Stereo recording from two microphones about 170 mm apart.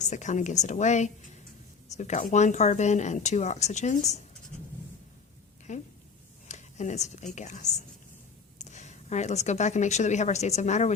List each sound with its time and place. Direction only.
0.0 s speech: 45° left (ahead or behind)
5.7 s speech: 45° left (ahead or behind)
6.5 s a sound: 45° left (ahead or behind)
7.3 s speech: 45° left (ahead or behind)